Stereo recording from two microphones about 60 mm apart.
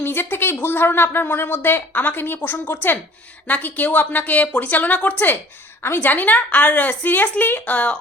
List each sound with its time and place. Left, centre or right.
0.0 s a woman's voice: left